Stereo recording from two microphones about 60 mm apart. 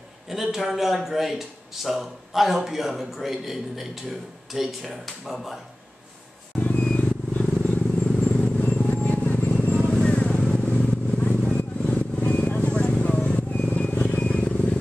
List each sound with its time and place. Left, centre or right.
0.3 s speech: centre
6.6 s vehicle: left
8.2 s a sound: centre
9.6 s vehicle: left
9.8 s vehicle: centre